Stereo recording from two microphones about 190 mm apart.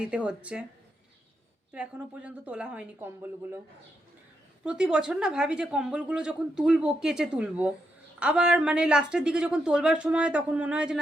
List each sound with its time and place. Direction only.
0.0 s speech: 5° right (ahead or behind)
1.7 s a woman's voice: 5° right (ahead or behind)
4.6 s speech: 5° right (ahead or behind)